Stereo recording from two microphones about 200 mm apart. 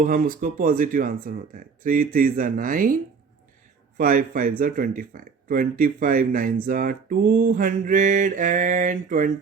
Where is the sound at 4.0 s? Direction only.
45° right (ahead or behind).